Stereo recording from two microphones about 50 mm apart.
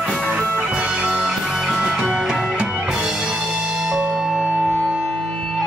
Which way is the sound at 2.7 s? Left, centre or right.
Centre.